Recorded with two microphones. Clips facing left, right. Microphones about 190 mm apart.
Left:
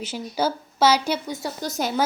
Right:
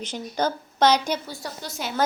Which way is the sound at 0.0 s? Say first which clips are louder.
Left 1 dB; 5° left (ahead or behind).